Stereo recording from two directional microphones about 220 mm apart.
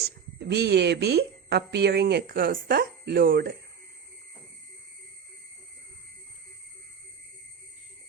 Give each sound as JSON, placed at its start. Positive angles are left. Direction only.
{"t": 0.3, "sound": "speech", "side_deg": -50}